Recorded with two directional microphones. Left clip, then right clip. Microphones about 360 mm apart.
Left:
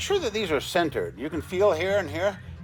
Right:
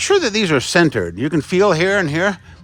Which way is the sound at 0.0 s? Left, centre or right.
Right.